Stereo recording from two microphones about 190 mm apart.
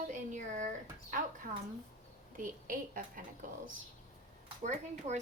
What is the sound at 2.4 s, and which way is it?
Speech, 45° right (ahead or behind).